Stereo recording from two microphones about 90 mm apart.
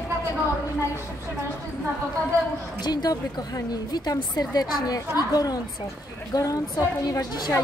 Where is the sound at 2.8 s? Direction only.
50° left (ahead or behind).